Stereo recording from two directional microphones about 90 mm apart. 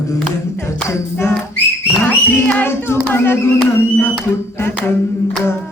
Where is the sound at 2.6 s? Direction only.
30° left (ahead or behind).